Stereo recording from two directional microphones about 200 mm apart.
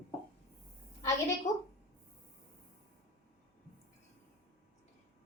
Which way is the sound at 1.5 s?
35° left (ahead or behind).